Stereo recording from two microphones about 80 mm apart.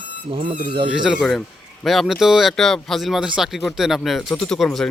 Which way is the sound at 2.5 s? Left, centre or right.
Centre.